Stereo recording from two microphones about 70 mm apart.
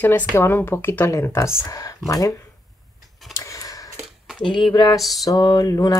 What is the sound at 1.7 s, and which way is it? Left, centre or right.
Speech, left.